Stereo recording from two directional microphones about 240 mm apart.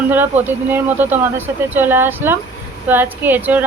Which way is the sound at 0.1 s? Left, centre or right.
Centre.